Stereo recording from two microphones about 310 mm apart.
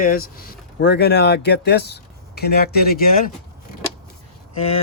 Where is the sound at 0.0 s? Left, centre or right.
Left.